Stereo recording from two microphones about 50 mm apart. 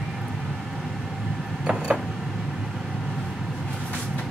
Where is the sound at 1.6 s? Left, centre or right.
Right.